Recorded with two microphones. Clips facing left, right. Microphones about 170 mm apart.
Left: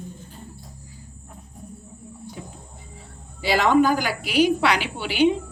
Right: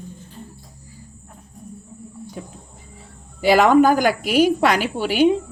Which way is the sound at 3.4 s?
50° right (ahead or behind).